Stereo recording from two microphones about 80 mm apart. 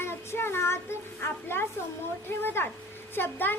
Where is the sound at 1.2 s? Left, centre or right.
Left.